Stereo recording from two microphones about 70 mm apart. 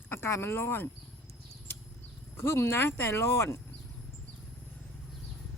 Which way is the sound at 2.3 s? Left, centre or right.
Left.